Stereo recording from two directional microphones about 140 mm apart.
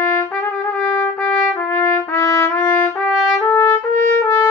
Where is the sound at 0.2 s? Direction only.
10° left (ahead or behind).